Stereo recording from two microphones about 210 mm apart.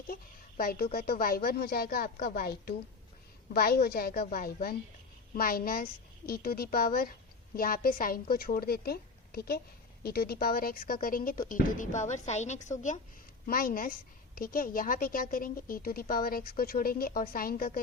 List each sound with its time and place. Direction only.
0.1 s a woman's voice: 45° left (ahead or behind)